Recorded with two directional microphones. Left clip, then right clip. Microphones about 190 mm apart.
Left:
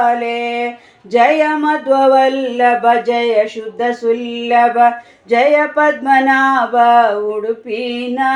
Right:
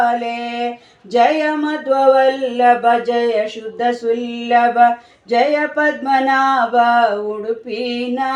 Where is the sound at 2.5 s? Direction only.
5° left (ahead or behind).